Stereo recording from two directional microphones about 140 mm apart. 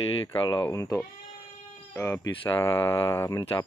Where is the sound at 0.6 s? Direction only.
20° left (ahead or behind).